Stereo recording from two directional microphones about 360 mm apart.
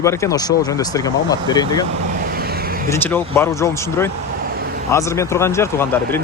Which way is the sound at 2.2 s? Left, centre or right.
Right.